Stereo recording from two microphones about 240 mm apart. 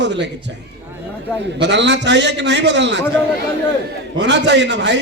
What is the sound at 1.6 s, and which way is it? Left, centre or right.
A man's voice, right.